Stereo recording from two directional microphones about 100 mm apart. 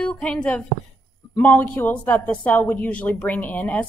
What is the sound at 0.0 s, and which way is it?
Speech, 10° left (ahead or behind).